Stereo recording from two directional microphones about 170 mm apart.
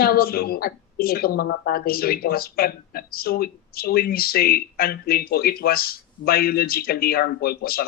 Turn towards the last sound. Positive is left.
turn(degrees=65)  # may be behind; listen again after turning